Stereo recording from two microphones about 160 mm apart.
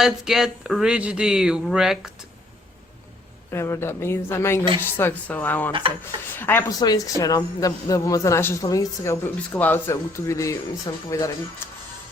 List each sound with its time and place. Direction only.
0.0 s a man's voice: 5° right (ahead or behind)
3.5 s a man's voice: 15° left (ahead or behind)